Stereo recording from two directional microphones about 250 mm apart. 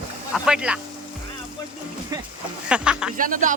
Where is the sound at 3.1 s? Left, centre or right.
Right.